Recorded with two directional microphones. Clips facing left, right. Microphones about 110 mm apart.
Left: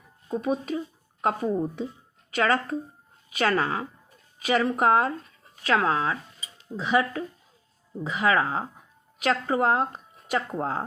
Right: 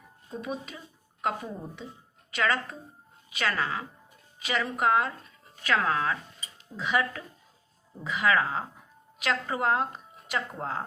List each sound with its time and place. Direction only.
0.4 s speech: 40° left (ahead or behind)
5.6 s a woman's voice: 30° left (ahead or behind)